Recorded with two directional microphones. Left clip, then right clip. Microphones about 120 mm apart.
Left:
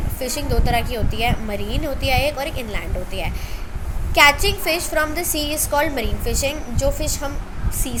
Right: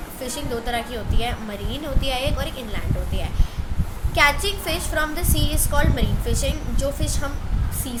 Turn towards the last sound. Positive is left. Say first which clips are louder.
# left 4 dB
turn(degrees=30)  # may be behind; listen again after turning